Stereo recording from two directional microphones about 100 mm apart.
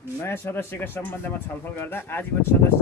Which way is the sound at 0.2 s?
25° left (ahead or behind).